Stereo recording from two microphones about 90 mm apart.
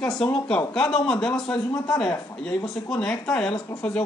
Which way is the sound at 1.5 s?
40° left (ahead or behind).